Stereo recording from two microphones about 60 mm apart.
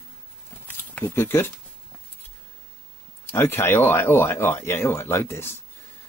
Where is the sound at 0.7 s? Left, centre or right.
Left.